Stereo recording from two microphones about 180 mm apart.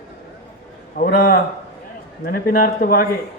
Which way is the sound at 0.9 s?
55° left (ahead or behind).